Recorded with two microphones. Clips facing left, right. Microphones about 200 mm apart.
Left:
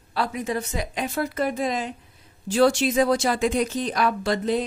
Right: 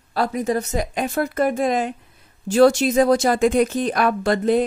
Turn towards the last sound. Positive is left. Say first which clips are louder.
# right 5 dB
turn(degrees=-55)  # may be behind; listen again after turning